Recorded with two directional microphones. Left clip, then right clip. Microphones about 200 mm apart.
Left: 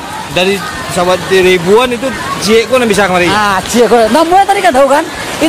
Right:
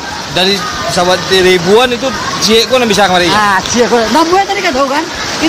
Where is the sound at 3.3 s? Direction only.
50° left (ahead or behind).